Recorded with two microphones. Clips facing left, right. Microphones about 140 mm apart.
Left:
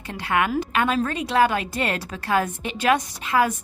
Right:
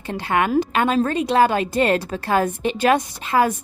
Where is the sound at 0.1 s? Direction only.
30° right (ahead or behind).